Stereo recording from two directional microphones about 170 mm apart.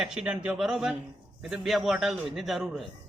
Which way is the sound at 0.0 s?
5° right (ahead or behind).